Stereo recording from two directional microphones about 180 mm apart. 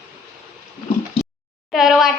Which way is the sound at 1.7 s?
Centre (ahead or behind).